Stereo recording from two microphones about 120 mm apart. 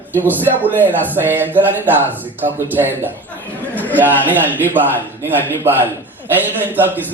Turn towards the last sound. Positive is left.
turn(degrees=-15)  # may be behind; listen again after turning